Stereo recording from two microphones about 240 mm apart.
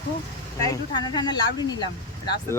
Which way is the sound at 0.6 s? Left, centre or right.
Centre.